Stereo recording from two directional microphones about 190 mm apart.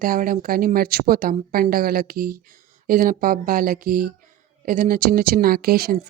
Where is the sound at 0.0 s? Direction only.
50° right (ahead or behind).